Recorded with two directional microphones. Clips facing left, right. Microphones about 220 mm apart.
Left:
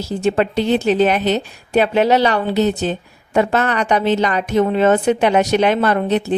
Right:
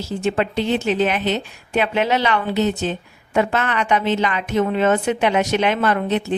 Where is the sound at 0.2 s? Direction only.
40° left (ahead or behind).